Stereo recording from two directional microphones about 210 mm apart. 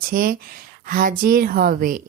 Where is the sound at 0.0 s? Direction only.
45° right (ahead or behind).